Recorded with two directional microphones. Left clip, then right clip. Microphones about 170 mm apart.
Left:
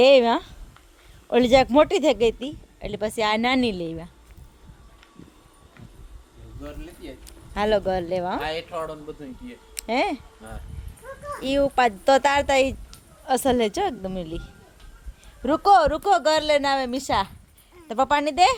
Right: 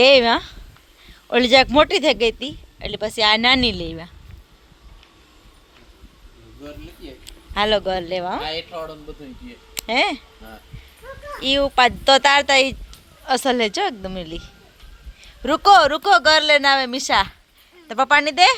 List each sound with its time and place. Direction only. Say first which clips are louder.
0.0 s a woman's voice: right 3 dB; 10° left (ahead or behind)
6.7 s speech: right 1 dB; 5° left (ahead or behind)
9.7 s a sound: right 4 dB; 5° left (ahead or behind)
11.0 s a sound: right 2 dB; 50° right (ahead or behind)
11.3 s a woman's voice: right 4 dB; 10° left (ahead or behind)
15.4 s a woman's voice: right 4 dB; centre (ahead or behind); by 18.5 s 15° left (ahead or behind)